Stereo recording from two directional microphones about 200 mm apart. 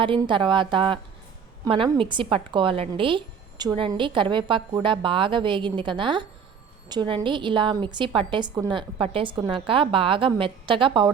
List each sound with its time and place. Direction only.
0.0 s a woman's voice: 25° right (ahead or behind)